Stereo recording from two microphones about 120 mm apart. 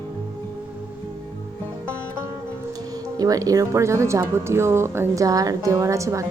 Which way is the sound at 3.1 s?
30° right (ahead or behind).